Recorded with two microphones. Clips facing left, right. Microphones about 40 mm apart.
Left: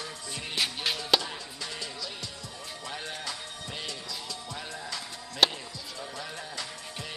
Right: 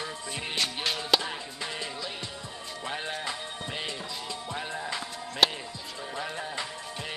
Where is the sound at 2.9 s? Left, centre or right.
Right.